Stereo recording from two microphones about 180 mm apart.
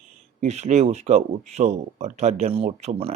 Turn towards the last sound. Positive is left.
turn(degrees=-30)  # may be behind; listen again after turning